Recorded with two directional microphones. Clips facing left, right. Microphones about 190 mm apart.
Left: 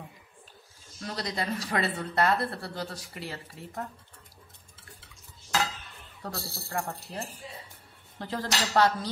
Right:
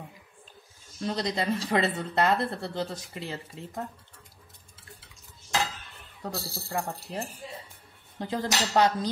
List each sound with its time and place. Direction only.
1.0 s speech: 20° right (ahead or behind)
6.2 s speech: 20° right (ahead or behind)
8.2 s cutlery: 15° right (ahead or behind)